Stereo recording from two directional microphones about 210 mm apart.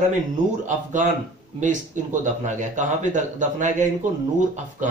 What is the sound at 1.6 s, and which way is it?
Speech, 35° right (ahead or behind).